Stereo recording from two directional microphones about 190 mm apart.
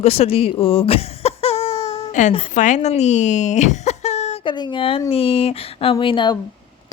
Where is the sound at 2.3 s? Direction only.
30° left (ahead or behind).